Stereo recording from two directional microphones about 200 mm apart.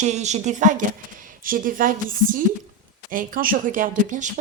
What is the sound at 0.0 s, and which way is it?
A woman's voice, 35° right (ahead or behind).